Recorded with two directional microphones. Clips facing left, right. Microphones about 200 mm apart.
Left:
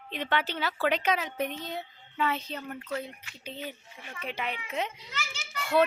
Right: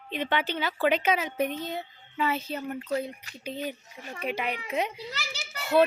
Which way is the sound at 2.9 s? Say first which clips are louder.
Right 5 dB; 40° right (ahead or behind).